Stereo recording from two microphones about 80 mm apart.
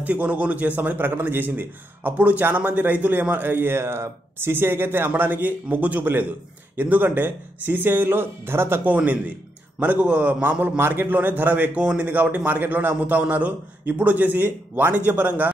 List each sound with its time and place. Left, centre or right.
0.0 s a man's voice: centre